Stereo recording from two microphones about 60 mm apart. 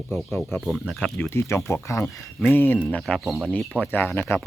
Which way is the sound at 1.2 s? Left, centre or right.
Left.